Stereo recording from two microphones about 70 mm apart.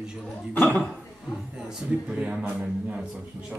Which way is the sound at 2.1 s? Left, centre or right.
Centre.